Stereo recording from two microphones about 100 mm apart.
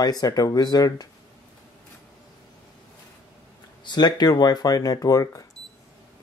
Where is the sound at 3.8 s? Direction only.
45° left (ahead or behind).